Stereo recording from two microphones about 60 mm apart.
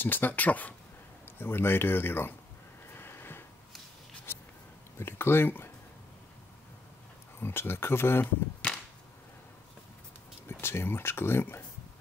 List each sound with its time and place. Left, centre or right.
0.0 s speech: left
1.2 s speech: left
2.9 s a sound: left
4.9 s speech: left
7.3 s speech: left
10.5 s speech: left